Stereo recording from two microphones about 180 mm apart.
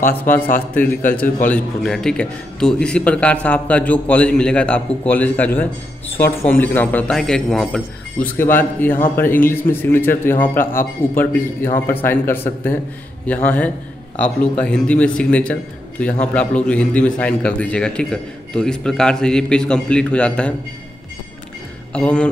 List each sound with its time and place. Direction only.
0.3 s a man's voice: 50° left (ahead or behind)
1.4 s a man's voice: 5° left (ahead or behind)
21.9 s a man's voice: 5° left (ahead or behind)